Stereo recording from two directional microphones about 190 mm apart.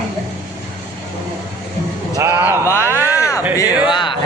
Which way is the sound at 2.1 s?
15° right (ahead or behind).